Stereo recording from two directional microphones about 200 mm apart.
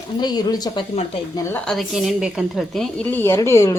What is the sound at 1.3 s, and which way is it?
A woman's voice, 5° left (ahead or behind).